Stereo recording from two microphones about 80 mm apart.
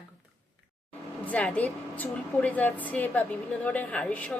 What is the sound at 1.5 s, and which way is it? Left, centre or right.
A woman's voice, left.